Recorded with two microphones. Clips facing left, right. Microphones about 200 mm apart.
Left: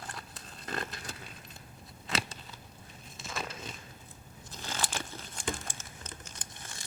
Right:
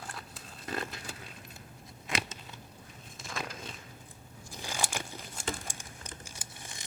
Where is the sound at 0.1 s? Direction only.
Centre (ahead or behind).